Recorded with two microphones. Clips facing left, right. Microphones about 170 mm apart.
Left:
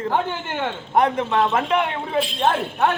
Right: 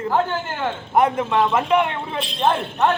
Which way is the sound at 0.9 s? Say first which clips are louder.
Right 1 dB; centre (ahead or behind).